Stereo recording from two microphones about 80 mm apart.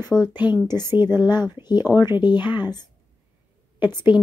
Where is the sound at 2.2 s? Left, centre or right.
Left.